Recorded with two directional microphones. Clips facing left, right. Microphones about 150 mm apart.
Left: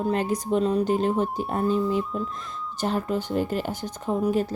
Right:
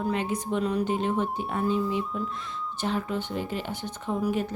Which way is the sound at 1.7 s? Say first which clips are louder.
Left 4 dB; centre (ahead or behind).